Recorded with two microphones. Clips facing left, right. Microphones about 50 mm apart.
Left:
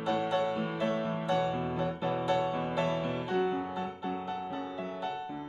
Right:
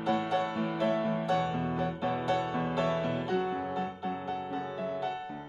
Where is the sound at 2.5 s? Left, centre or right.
Left.